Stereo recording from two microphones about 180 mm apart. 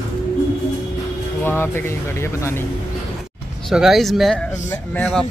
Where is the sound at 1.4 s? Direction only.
10° left (ahead or behind).